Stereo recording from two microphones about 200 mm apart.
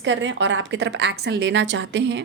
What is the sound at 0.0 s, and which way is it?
A woman's voice, 65° right (ahead or behind).